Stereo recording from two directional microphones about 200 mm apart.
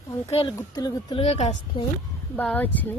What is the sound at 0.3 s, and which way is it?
Speech, 25° left (ahead or behind).